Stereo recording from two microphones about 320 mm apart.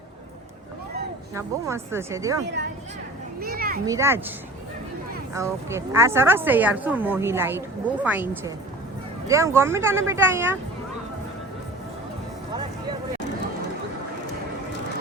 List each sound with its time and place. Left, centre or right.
1.4 s a woman's voice: centre
3.4 s children playing: right
3.8 s a woman's voice: centre
5.3 s a woman's voice: centre